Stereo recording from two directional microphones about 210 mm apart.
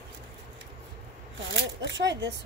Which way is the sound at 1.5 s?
60° right (ahead or behind).